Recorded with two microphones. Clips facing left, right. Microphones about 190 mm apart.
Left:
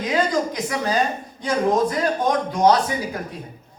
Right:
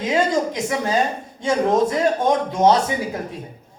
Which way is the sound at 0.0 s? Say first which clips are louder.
Right 2 dB; 25° right (ahead or behind).